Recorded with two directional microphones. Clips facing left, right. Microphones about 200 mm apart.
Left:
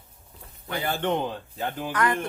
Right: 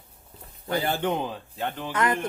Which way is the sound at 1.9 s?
25° right (ahead or behind).